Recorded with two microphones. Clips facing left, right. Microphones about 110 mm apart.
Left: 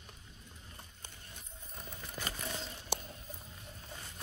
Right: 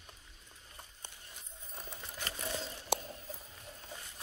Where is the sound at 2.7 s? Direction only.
30° right (ahead or behind).